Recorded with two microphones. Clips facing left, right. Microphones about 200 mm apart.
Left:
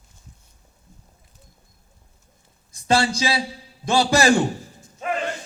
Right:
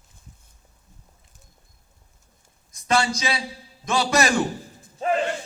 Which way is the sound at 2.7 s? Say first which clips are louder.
Left 2 dB; 30° left (ahead or behind).